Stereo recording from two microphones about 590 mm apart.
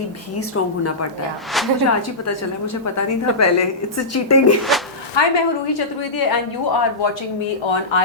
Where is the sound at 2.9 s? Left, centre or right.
Left.